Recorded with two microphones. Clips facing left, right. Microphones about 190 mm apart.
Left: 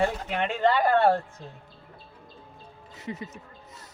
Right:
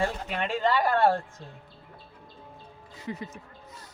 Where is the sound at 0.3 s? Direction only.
60° left (ahead or behind).